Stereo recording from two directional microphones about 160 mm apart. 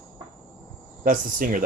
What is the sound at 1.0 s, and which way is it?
Speech, 55° right (ahead or behind).